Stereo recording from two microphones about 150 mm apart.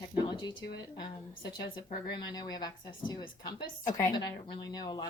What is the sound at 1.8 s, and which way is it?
Speech, 90° left.